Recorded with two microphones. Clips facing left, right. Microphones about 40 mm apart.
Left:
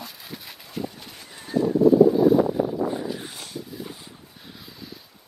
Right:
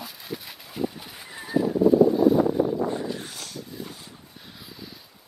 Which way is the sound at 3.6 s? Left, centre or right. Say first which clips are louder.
Left 1 dB; centre.